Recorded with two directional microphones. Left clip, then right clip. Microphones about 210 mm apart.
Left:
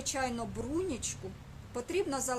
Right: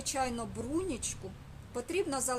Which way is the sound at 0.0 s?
10° right (ahead or behind).